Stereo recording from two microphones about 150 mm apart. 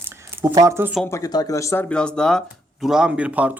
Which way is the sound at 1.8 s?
5° left (ahead or behind).